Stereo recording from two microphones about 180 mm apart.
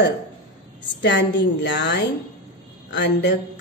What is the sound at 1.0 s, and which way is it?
A woman's voice, 75° left (ahead or behind).